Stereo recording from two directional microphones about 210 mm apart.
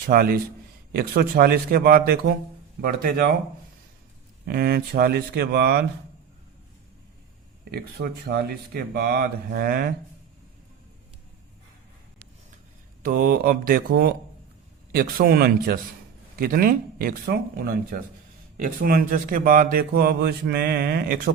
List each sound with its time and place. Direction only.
0.1 s speech: 45° right (ahead or behind)
4.4 s speech: 50° right (ahead or behind)
7.7 s speech: 50° right (ahead or behind)
13.0 s speech: 45° right (ahead or behind)